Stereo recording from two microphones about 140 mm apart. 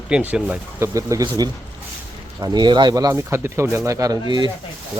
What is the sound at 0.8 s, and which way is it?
Speech, 20° right (ahead or behind).